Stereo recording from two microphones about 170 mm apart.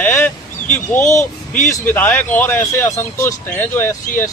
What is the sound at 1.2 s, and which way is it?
Speech, 45° left (ahead or behind).